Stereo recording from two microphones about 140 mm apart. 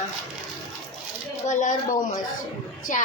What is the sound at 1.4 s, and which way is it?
Speech, 65° left (ahead or behind).